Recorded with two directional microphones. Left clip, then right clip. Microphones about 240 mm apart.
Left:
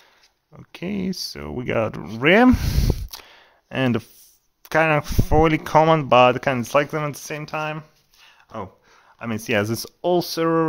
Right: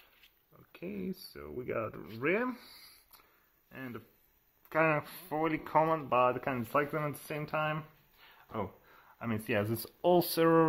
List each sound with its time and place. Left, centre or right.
0.5 s speech: left
2.1 s a sound: left
4.6 s speech: left; by 10.6 s centre